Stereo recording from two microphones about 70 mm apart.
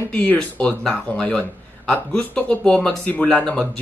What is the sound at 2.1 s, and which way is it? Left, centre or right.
Speech, centre.